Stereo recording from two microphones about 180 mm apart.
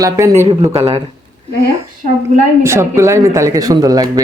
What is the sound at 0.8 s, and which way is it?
Speech, 35° right (ahead or behind).